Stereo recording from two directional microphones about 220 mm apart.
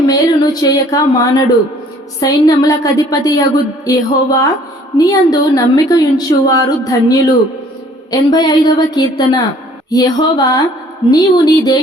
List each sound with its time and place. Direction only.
0.1 s a woman's voice: 15° left (ahead or behind)